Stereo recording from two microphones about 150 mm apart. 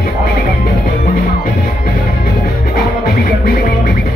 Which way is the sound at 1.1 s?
80° left.